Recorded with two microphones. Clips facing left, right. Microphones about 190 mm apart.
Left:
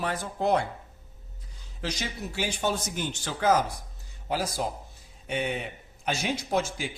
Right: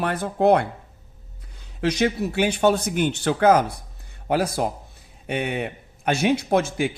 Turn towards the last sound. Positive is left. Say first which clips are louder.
# right 7 dB
turn(degrees=-60)  # may be behind; listen again after turning